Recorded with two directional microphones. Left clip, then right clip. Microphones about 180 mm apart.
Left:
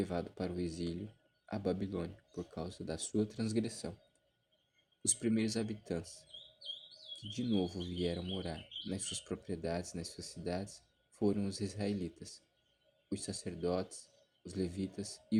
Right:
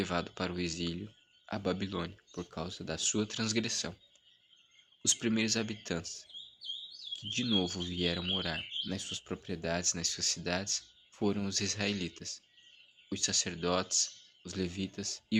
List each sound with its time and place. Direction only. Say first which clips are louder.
0.0 s speech: right 4 dB; 15° right (ahead or behind)
5.0 s speech: right 5 dB; 20° right (ahead or behind)